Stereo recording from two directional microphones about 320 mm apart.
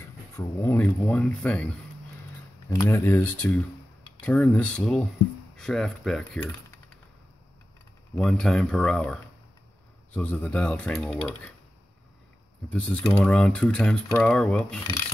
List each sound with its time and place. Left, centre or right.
0.4 s speech: centre
2.7 s speech: centre
8.2 s speech: centre
12.6 s speech: centre